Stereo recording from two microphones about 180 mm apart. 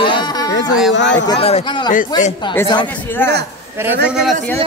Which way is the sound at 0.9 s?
85° left.